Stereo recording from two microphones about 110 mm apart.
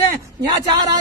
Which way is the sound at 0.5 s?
40° right (ahead or behind).